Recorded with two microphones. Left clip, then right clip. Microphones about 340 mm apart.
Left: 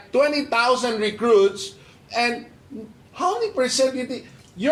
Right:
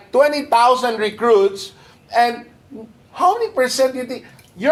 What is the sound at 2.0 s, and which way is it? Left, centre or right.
Speech, right.